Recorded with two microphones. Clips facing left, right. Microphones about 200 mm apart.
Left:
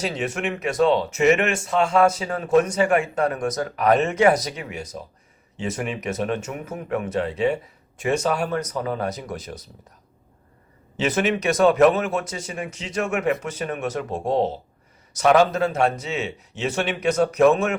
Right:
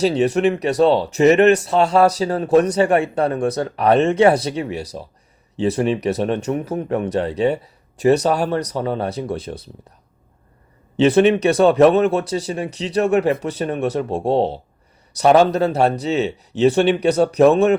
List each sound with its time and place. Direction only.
0.0 s speech: 35° right (ahead or behind)
10.9 s speech: 30° right (ahead or behind)